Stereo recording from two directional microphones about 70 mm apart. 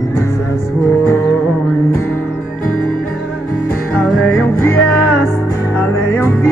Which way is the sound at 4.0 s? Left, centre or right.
Centre.